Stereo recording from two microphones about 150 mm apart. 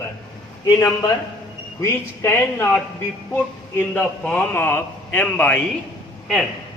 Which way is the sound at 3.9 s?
10° left (ahead or behind).